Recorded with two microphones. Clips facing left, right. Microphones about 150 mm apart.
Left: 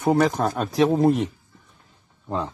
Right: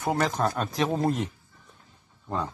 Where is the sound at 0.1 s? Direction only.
10° left (ahead or behind).